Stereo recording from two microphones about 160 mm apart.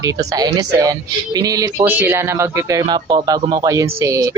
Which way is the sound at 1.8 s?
10° right (ahead or behind).